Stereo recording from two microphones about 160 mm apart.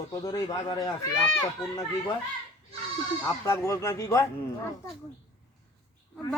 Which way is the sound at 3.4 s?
20° left (ahead or behind).